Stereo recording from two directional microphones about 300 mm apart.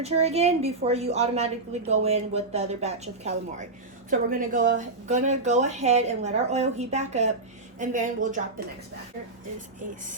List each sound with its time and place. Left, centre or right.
0.0 s speech: right